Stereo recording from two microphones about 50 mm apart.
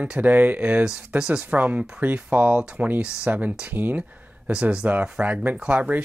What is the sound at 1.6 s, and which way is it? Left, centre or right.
Speech, right.